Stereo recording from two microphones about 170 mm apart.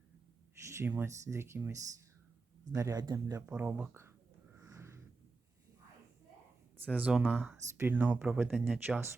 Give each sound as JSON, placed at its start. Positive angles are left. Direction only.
{"t": 0.6, "sound": "a sound", "side_deg": -15}
{"t": 1.3, "sound": "speech", "side_deg": -15}
{"t": 2.7, "sound": "speech", "side_deg": -20}
{"t": 3.4, "sound": "speech", "side_deg": -10}
{"t": 4.5, "sound": "a sound", "side_deg": -15}
{"t": 6.8, "sound": "speech", "side_deg": -10}